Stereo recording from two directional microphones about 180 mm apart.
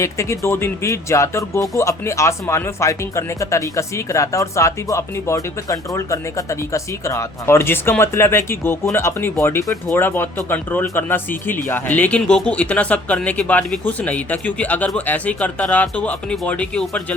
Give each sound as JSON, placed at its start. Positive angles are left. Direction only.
{"t": 0.0, "sound": "speech", "side_deg": 15}